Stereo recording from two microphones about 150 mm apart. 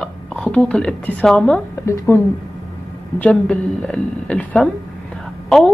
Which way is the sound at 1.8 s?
15° left (ahead or behind).